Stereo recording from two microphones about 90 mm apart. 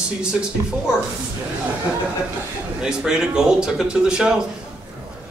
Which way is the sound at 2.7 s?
10° right (ahead or behind).